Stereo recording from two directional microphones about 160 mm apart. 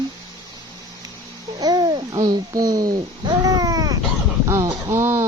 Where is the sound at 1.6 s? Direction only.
25° right (ahead or behind).